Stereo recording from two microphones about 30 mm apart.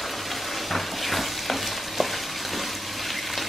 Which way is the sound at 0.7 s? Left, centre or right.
Centre.